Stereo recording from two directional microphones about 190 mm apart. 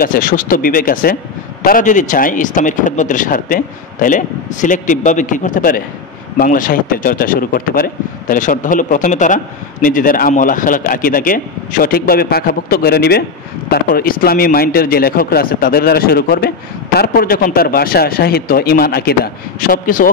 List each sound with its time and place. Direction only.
0.0 s speech: 45° left (ahead or behind)